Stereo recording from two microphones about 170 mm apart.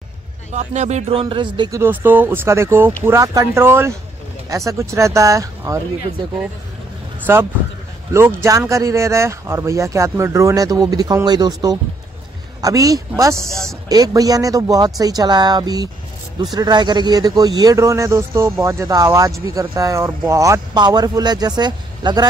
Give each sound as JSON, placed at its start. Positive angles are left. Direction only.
{"t": 0.5, "sound": "speech", "side_deg": -40}
{"t": 1.2, "sound": "a man's voice", "side_deg": -30}
{"t": 1.8, "sound": "speech", "side_deg": -10}
{"t": 7.3, "sound": "a man's voice", "side_deg": -15}
{"t": 13.5, "sound": "speech", "side_deg": 0}
{"t": 13.8, "sound": "a man's voice", "side_deg": -20}